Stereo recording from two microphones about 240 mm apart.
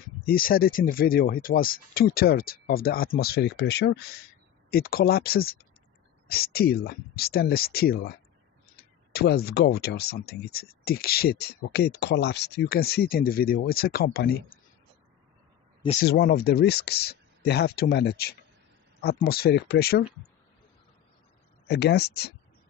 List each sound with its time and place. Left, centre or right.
0.3 s speech: left
9.1 s speech: left
16.0 s speech: left
21.6 s speech: left